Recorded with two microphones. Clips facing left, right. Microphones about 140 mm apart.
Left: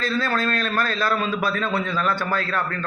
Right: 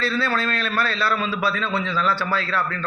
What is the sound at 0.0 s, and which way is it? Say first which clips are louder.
A man's voice: even; 45° left (ahead or behind).